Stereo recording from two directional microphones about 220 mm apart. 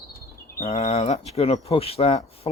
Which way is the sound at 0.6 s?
30° left (ahead or behind).